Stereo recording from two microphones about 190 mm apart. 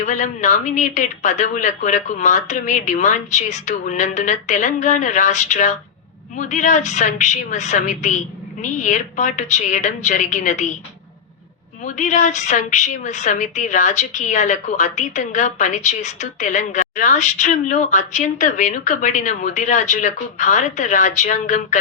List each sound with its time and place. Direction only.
0.0 s a woman's voice: 40° left (ahead or behind)
11.9 s a woman's voice: 40° left (ahead or behind)